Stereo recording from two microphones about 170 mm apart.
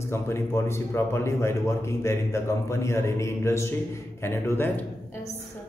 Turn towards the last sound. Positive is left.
turn(degrees=15)  # may be behind; listen again after turning